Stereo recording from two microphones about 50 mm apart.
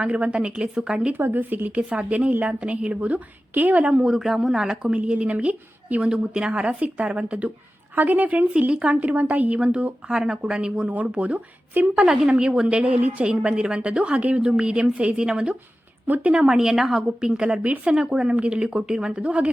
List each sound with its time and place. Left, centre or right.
0.0 s a woman's voice: right
1.1 s speech: right
1.9 s a woman's voice: right
4.0 s a woman's voice: centre
4.9 s a woman's voice: right
12.3 s a woman's voice: centre
17.6 s a woman's voice: right
17.9 s a woman's voice: centre